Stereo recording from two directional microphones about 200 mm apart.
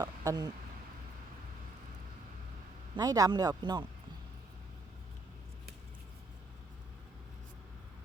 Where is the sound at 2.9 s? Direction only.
20° right (ahead or behind).